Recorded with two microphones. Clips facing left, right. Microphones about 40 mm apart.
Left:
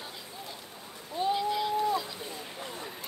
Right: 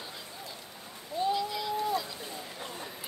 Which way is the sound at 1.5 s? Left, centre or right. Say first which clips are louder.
Left 3 dB; left.